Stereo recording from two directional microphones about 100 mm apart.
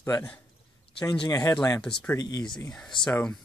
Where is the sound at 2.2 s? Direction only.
40° left (ahead or behind).